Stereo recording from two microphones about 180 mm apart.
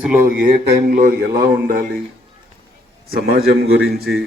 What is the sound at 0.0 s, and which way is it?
Speech, 10° right (ahead or behind).